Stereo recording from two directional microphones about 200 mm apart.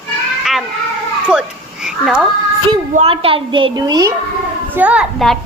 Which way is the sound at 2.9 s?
30° right (ahead or behind).